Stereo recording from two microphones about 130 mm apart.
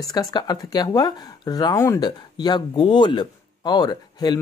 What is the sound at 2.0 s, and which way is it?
Speech, 35° left (ahead or behind).